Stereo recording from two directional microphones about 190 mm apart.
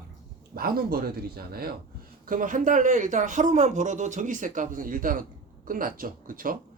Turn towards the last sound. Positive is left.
turn(degrees=-50)  # may be behind; listen again after turning